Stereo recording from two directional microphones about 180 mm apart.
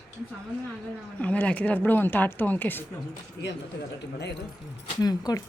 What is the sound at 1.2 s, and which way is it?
Speech, 10° left (ahead or behind).